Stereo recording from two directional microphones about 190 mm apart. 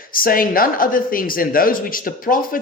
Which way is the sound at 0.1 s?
50° left (ahead or behind).